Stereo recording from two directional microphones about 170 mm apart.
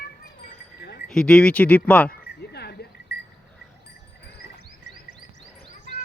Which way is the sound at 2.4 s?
75° left (ahead or behind).